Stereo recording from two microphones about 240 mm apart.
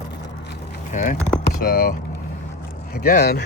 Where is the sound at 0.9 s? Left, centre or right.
Left.